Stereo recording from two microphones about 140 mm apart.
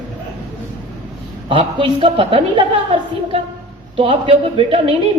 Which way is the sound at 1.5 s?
40° right (ahead or behind).